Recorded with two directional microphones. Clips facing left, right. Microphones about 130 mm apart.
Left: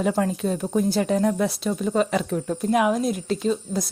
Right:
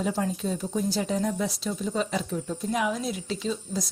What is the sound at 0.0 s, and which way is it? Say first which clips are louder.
Speech: left 5 dB; 60° left (ahead or behind).